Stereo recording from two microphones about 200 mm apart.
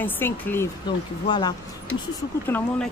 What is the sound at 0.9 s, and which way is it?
Speech, 20° left (ahead or behind).